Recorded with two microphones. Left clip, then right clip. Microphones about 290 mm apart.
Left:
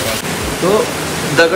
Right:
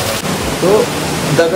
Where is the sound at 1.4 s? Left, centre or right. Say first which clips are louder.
Left 2 dB; centre.